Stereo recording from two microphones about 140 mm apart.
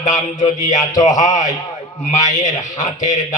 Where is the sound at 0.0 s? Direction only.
60° left (ahead or behind).